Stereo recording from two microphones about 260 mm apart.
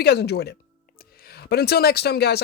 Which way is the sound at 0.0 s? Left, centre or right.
Left.